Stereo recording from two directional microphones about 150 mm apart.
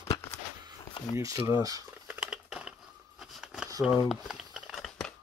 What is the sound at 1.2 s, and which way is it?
Speech, 20° right (ahead or behind).